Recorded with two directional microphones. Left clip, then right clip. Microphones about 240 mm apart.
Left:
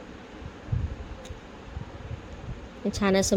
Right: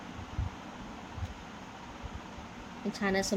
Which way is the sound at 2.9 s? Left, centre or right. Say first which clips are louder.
Left 7 dB; left.